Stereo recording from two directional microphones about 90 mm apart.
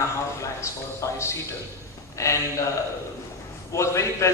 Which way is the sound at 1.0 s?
30° left (ahead or behind).